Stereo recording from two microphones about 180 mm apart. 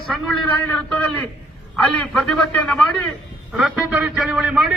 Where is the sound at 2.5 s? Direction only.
Centre (ahead or behind).